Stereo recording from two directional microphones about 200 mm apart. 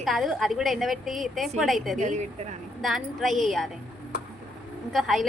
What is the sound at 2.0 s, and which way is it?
Speech, 35° right (ahead or behind).